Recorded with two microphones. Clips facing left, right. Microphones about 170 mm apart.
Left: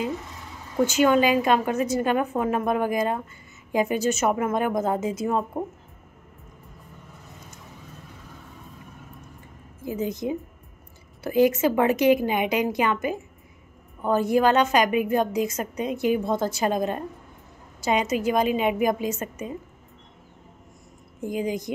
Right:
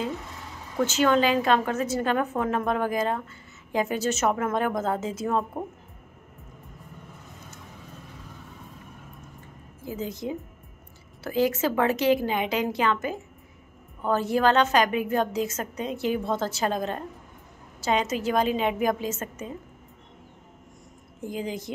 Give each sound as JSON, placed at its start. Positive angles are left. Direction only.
{"t": 0.7, "sound": "a woman's voice", "side_deg": 10}
{"t": 9.8, "sound": "a woman's voice", "side_deg": 20}
{"t": 21.2, "sound": "a woman's voice", "side_deg": 15}